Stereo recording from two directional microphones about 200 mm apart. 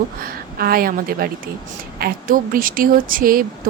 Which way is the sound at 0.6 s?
50° right (ahead or behind).